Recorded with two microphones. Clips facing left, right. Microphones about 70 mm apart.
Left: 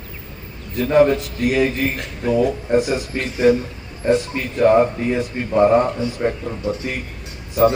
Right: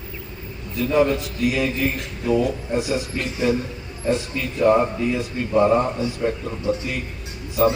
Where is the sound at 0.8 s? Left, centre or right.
Left.